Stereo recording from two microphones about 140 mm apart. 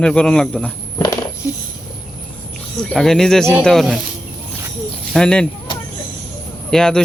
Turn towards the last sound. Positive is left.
turn(degrees=5)  # may be behind; listen again after turning